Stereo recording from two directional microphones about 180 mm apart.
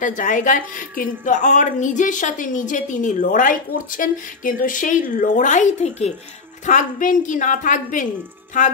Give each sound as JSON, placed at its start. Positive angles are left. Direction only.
{"t": 0.0, "sound": "a woman's voice", "side_deg": 45}